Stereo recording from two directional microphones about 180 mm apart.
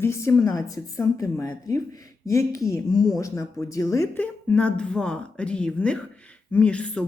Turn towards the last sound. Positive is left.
turn(degrees=5)  # may be behind; listen again after turning